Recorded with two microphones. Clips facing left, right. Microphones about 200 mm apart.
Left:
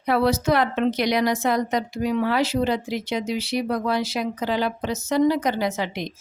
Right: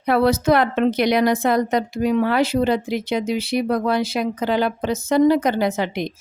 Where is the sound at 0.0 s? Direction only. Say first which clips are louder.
Right 3 dB; 55° right (ahead or behind).